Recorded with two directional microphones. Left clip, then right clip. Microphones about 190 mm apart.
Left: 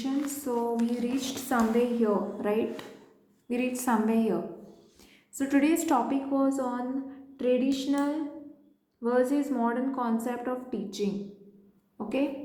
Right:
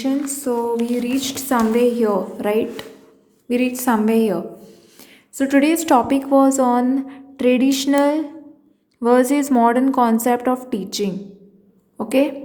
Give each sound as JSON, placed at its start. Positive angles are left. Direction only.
{"t": 0.0, "sound": "a woman's voice", "side_deg": -35}
{"t": 5.4, "sound": "a woman's voice", "side_deg": -35}
{"t": 6.3, "sound": "a woman's voice", "side_deg": -55}